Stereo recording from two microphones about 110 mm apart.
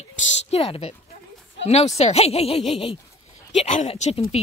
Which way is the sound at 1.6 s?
75° left (ahead or behind).